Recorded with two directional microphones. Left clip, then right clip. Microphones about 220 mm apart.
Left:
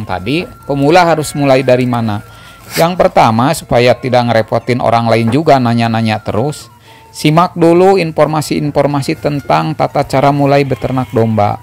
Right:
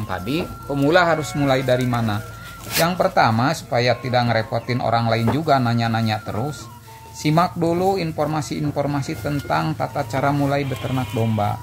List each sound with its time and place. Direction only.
0.1 s speech: 30° left (ahead or behind)